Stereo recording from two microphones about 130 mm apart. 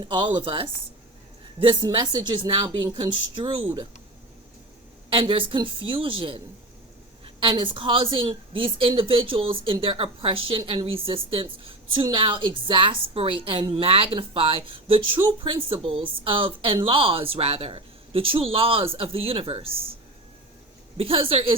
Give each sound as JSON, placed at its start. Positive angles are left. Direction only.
{"t": 0.0, "sound": "a woman's voice", "side_deg": -40}
{"t": 5.0, "sound": "a woman's voice", "side_deg": -45}
{"t": 21.0, "sound": "speech", "side_deg": -45}